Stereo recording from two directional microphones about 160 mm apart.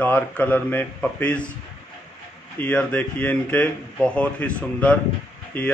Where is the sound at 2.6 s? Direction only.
10° left (ahead or behind).